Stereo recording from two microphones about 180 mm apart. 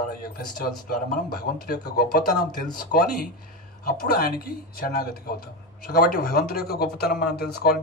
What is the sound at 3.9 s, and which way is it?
Speech, 60° left (ahead or behind).